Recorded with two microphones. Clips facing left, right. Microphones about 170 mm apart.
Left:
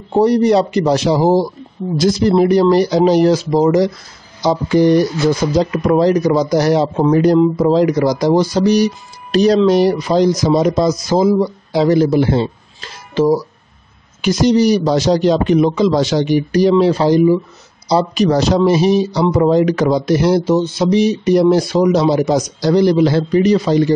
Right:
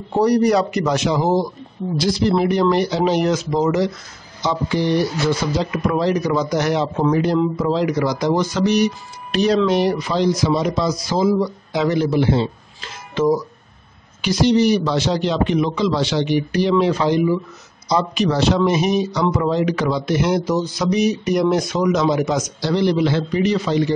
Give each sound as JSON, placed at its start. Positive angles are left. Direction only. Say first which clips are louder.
{"t": 0.1, "sound": "speech", "louder": "left 4 dB", "side_deg": 25}
{"t": 2.0, "sound": "speech", "louder": "left 5 dB", "side_deg": 45}
{"t": 11.3, "sound": "speech", "louder": "left 5 dB", "side_deg": 30}
{"t": 14.2, "sound": "speech", "louder": "left 3 dB", "side_deg": 45}